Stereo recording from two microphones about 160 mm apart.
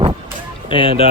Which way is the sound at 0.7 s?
35° left (ahead or behind).